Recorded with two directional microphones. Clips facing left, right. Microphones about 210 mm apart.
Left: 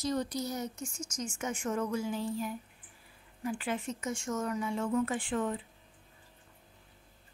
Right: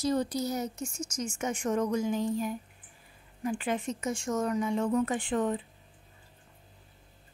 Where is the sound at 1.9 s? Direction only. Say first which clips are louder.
Right 5 dB; 15° right (ahead or behind).